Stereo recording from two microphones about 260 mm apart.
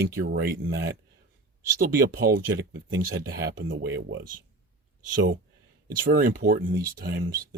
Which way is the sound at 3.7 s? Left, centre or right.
Right.